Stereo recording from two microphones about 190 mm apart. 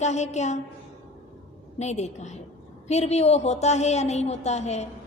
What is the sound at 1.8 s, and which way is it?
A woman's voice, 35° left (ahead or behind).